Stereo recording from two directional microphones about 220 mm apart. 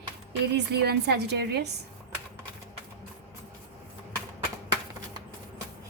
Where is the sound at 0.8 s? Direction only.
50° right (ahead or behind).